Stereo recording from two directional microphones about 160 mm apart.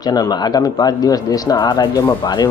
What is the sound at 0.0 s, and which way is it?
Speech, 25° left (ahead or behind).